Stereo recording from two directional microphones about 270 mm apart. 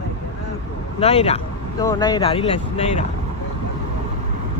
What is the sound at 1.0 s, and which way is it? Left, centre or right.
Speech, left.